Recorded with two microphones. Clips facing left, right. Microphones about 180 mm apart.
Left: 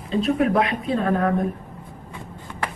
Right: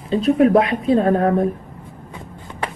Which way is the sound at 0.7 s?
30° right (ahead or behind).